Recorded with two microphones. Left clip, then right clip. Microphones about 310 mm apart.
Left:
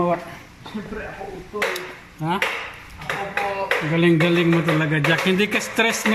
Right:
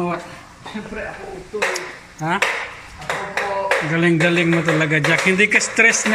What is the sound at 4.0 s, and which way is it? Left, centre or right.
Speech, centre.